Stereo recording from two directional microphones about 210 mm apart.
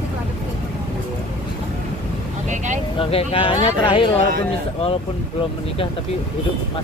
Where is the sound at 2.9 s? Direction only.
25° left (ahead or behind).